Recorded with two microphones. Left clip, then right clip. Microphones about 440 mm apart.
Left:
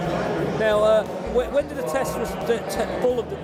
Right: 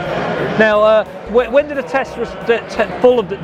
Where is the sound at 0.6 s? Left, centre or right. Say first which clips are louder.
Right 8 dB; right.